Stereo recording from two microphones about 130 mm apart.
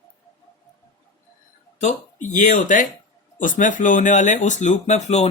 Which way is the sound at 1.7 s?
70° left (ahead or behind).